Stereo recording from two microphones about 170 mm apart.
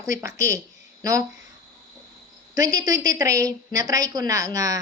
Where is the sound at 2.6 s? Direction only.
20° right (ahead or behind).